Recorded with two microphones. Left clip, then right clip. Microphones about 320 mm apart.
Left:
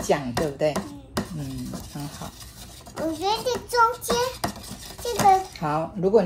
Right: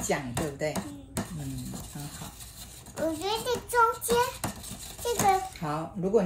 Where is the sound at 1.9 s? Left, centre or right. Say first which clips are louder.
Left 9 dB; left.